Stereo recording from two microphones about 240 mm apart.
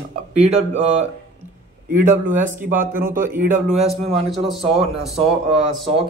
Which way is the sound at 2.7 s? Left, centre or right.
Centre.